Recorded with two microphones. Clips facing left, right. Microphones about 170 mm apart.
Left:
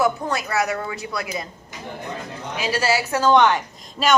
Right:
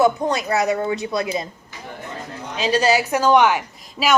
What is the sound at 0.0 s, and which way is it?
A woman's voice, 20° right (ahead or behind).